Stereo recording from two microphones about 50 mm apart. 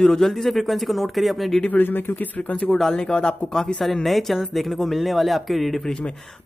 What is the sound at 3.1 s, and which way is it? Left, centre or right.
Speech, centre.